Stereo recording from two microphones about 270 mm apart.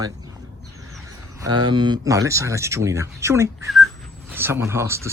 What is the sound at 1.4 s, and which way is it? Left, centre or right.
Speech, right.